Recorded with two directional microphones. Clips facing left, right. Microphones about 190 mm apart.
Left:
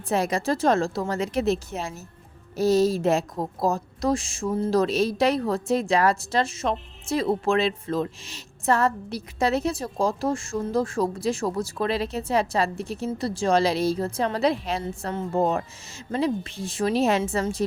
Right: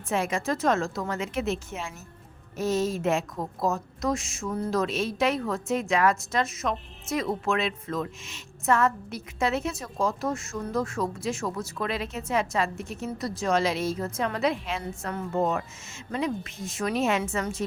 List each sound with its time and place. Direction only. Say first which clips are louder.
0.1 s a woman's voice: left 3 dB; 35° left (ahead or behind)